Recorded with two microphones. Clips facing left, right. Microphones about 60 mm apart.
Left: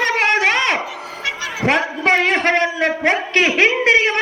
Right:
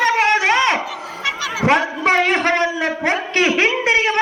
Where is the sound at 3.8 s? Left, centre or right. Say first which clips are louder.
Left 2 dB; left.